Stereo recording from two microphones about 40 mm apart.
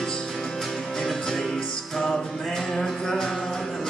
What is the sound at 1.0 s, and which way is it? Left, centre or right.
Music, centre.